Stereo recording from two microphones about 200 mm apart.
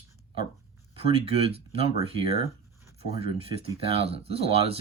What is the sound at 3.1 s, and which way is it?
Speech, 30° right (ahead or behind).